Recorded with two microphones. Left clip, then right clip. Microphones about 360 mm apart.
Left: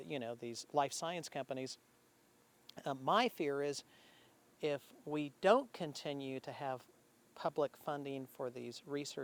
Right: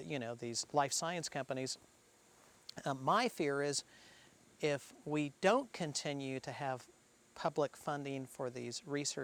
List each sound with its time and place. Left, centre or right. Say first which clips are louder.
0.0 s speech: right 1 dB; right